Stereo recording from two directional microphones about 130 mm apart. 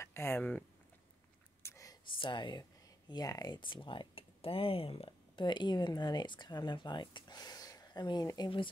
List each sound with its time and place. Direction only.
0.0 s speech: 20° left (ahead or behind)
1.6 s a sound: 25° left (ahead or behind)
2.1 s speech: 40° left (ahead or behind)